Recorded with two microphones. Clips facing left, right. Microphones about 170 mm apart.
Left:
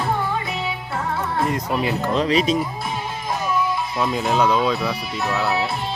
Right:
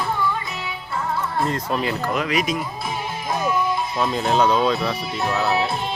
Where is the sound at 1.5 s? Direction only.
15° left (ahead or behind); by 2.6 s 35° left (ahead or behind).